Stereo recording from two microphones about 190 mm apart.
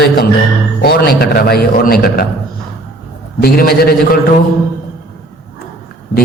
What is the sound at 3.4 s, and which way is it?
Speech, 50° left (ahead or behind).